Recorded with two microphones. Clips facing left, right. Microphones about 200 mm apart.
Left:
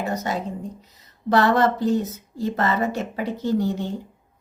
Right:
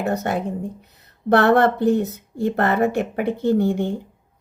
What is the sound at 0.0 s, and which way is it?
Speech, 60° right (ahead or behind).